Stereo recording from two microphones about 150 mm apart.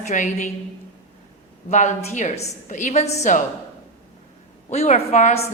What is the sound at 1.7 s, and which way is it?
A woman's voice, 50° left (ahead or behind).